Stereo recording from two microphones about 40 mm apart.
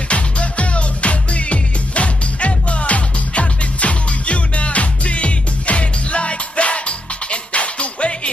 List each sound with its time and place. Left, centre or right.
0.1 s music: left